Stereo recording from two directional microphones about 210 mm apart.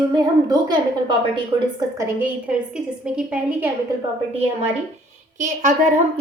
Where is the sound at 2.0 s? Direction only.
10° right (ahead or behind).